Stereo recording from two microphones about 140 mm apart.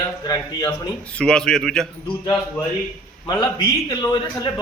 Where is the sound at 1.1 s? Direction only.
5° left (ahead or behind).